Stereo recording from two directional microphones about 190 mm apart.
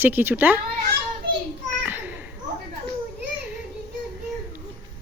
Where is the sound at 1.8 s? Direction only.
10° right (ahead or behind).